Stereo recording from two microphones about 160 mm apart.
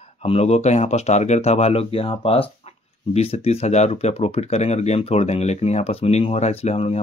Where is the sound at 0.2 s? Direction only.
40° left (ahead or behind).